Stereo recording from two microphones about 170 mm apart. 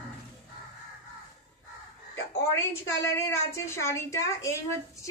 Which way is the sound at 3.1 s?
15° left (ahead or behind).